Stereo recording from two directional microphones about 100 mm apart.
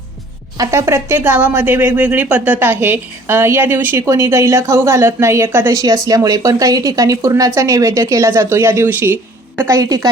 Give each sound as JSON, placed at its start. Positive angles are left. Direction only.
{"t": 0.5, "sound": "a woman's voice", "side_deg": -35}
{"t": 5.7, "sound": "speech", "side_deg": -35}
{"t": 9.6, "sound": "speech", "side_deg": -35}